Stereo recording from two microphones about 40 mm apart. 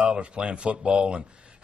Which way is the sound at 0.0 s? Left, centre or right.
Right.